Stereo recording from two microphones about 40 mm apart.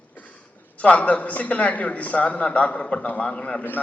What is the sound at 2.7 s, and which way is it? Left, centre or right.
Speech, left.